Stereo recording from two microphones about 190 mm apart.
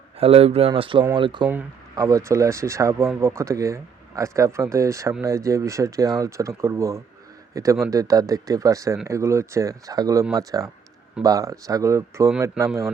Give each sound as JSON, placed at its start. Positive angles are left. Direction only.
{"t": 0.2, "sound": "speech", "side_deg": -30}
{"t": 1.5, "sound": "speech", "side_deg": -15}